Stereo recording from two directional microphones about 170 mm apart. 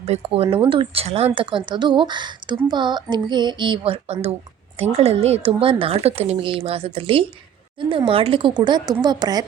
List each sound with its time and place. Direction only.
0.0 s speech: 35° right (ahead or behind)